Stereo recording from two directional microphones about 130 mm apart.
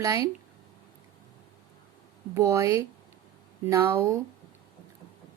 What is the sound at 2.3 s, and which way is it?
Speech, 25° right (ahead or behind).